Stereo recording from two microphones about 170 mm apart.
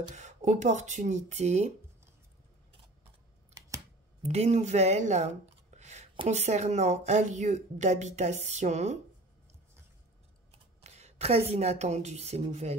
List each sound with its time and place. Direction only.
0.1 s speech: 45° right (ahead or behind)
4.2 s a woman's voice: 40° right (ahead or behind)
10.5 s speech: 40° right (ahead or behind)